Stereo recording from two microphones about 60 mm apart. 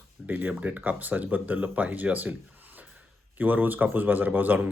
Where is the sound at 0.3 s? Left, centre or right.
Right.